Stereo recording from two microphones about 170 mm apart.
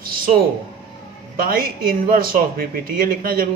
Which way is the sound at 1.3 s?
60° right (ahead or behind).